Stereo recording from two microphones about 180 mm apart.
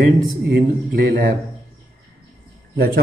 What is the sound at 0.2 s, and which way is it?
Speech, 50° right (ahead or behind).